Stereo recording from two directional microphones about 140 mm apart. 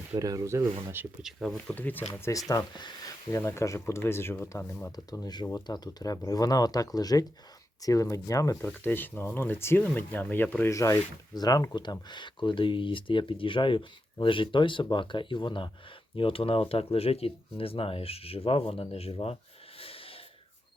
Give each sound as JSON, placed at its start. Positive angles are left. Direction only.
{"t": 0.2, "sound": "speech", "side_deg": -25}
{"t": 1.2, "sound": "speech", "side_deg": 0}
{"t": 1.5, "sound": "speech", "side_deg": 10}
{"t": 2.5, "sound": "speech", "side_deg": 30}
{"t": 5.2, "sound": "speech", "side_deg": 30}
{"t": 19.8, "sound": "snort", "side_deg": 40}